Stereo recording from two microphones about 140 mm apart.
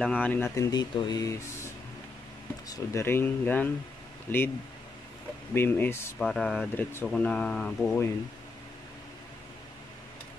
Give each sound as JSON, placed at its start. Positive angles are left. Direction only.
{"t": 0.0, "sound": "speech", "side_deg": 10}
{"t": 0.6, "sound": "speech", "side_deg": 30}
{"t": 2.7, "sound": "speech", "side_deg": 20}
{"t": 5.5, "sound": "speech", "side_deg": 15}
{"t": 6.1, "sound": "speech", "side_deg": 0}
{"t": 7.8, "sound": "speech", "side_deg": 20}